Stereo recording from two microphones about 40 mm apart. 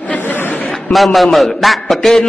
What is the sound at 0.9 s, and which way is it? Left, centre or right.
A man's voice, centre.